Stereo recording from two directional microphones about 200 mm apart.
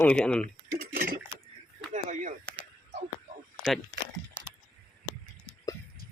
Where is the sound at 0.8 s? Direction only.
50° right (ahead or behind).